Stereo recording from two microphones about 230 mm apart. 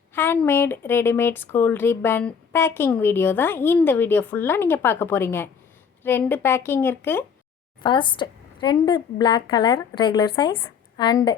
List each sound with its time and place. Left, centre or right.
0.1 s speech: centre
7.8 s a woman's voice: centre